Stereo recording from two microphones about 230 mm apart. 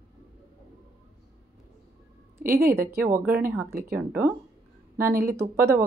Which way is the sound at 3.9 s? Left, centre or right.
Centre.